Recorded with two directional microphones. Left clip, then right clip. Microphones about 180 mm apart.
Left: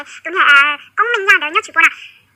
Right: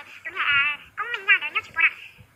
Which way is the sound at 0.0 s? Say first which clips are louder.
Left 13 dB; 45° left (ahead or behind).